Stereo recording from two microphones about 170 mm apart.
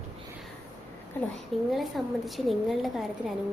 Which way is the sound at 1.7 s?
Centre (ahead or behind).